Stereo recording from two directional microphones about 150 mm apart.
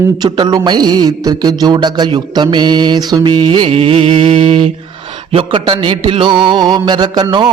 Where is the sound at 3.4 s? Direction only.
35° right (ahead or behind).